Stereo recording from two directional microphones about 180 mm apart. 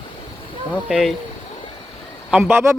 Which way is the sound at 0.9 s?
Centre (ahead or behind).